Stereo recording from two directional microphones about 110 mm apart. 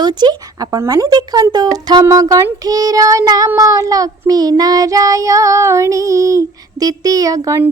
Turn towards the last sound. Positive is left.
turn(degrees=-30)  # may be behind; listen again after turning